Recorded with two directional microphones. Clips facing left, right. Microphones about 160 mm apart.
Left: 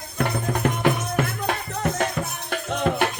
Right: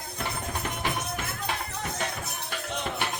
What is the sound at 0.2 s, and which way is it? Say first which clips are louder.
Music: left 10 dB; 60° left (ahead or behind).